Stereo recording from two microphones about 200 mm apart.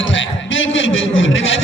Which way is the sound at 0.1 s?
70° left (ahead or behind).